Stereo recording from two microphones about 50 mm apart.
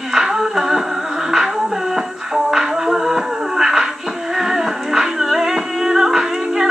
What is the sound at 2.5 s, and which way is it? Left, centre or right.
Music, centre.